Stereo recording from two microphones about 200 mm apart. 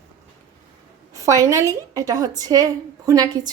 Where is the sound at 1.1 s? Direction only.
15° right (ahead or behind).